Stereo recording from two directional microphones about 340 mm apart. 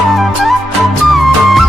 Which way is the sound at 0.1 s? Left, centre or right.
Centre.